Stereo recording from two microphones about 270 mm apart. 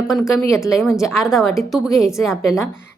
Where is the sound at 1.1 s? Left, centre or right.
Centre.